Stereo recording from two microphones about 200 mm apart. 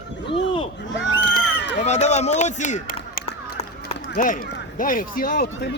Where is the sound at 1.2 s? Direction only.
60° left (ahead or behind).